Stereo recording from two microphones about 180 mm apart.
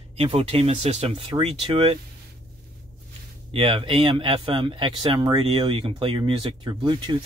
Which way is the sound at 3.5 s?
30° right (ahead or behind).